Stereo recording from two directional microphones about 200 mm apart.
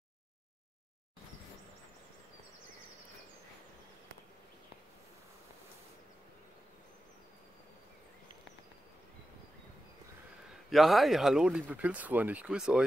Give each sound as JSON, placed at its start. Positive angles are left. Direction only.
{"t": 10.7, "sound": "speech", "side_deg": 0}